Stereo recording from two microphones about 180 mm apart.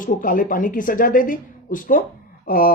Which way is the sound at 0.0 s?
50° left (ahead or behind).